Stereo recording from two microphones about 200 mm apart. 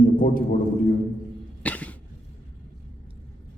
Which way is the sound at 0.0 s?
45° left (ahead or behind).